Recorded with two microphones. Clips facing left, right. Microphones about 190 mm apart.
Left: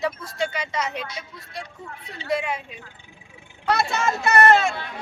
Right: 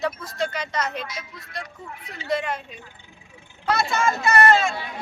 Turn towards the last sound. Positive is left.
turn(degrees=65)  # may be behind; listen again after turning